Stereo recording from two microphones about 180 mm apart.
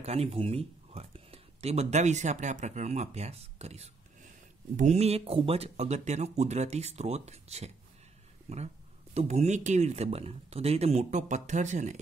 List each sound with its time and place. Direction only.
0.0 s speech: 35° right (ahead or behind)